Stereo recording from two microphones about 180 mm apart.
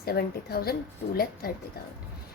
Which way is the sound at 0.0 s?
60° left (ahead or behind).